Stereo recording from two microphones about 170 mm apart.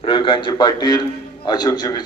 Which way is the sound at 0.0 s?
30° left (ahead or behind).